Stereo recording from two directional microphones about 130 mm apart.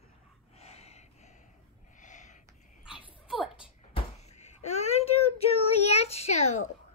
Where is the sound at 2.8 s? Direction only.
5° right (ahead or behind).